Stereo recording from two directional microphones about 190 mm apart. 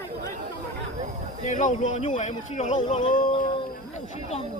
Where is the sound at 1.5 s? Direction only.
40° left (ahead or behind).